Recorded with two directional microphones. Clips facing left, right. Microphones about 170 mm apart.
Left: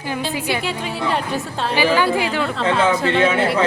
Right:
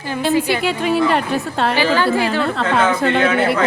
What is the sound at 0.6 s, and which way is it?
A woman's voice, 65° right (ahead or behind).